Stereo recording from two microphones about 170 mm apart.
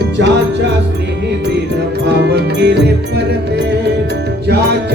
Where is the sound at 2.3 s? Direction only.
80° right.